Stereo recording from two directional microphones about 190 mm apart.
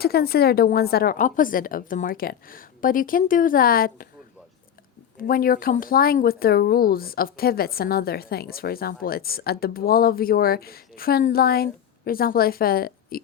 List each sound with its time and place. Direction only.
0.0 s speech: 55° left (ahead or behind)
5.2 s speech: 50° left (ahead or behind)